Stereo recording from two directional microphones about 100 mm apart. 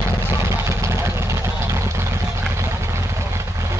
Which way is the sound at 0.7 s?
25° right (ahead or behind).